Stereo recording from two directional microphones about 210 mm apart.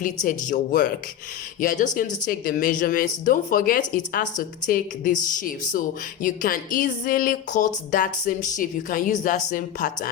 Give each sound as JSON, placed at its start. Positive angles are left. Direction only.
{"t": 0.0, "sound": "speech", "side_deg": 35}